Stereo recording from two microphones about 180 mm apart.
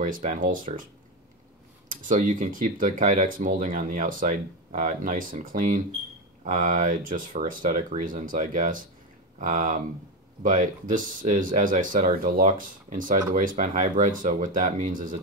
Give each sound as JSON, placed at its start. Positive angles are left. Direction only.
{"t": 0.0, "sound": "speech", "side_deg": -50}
{"t": 1.9, "sound": "speech", "side_deg": -45}